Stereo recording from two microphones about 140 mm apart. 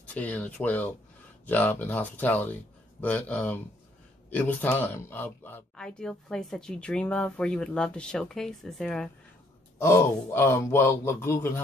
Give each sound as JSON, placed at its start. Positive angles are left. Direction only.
{"t": 0.1, "sound": "speech", "side_deg": 10}
{"t": 9.8, "sound": "speech", "side_deg": 20}